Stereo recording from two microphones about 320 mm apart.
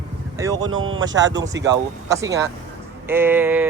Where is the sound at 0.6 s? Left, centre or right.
Right.